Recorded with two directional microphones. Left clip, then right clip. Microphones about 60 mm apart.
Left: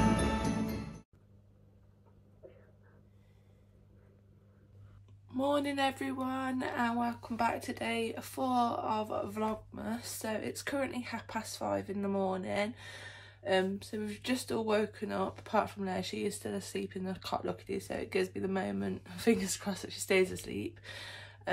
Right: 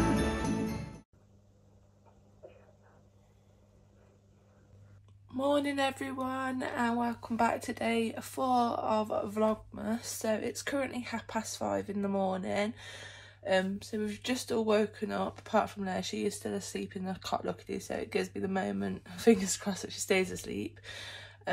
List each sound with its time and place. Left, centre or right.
5.3 s speech: left
7.0 s speech: centre
9.1 s speech: left